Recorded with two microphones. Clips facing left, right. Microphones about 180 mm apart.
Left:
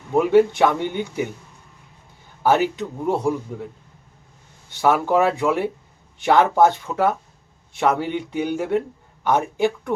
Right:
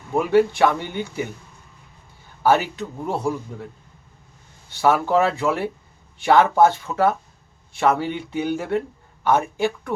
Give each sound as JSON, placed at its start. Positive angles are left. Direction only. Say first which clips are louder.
{"t": 0.1, "sound": "a man's voice", "louder": "left 2 dB", "side_deg": 20}
{"t": 2.4, "sound": "a man's voice", "louder": "left 1 dB", "side_deg": 20}
{"t": 4.7, "sound": "a man's voice", "louder": "even", "side_deg": 15}